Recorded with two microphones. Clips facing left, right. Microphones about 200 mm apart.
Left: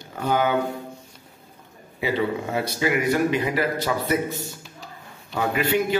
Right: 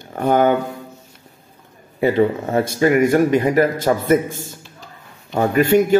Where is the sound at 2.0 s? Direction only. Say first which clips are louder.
Right 8 dB; 50° right (ahead or behind).